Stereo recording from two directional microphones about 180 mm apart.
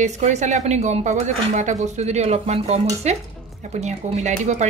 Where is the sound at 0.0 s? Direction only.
40° right (ahead or behind).